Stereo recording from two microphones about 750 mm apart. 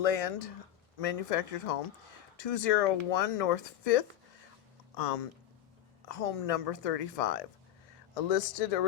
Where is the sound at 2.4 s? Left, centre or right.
Left.